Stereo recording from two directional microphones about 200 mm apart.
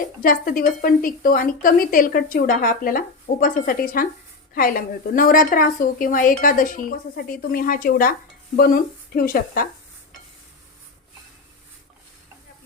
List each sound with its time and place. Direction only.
0.2 s a woman's voice: 45° left (ahead or behind)